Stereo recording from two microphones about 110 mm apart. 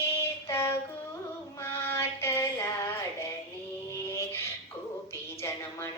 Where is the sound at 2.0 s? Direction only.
25° left (ahead or behind).